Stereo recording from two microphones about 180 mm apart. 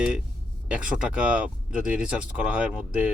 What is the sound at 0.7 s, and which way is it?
Speech, 5° right (ahead or behind).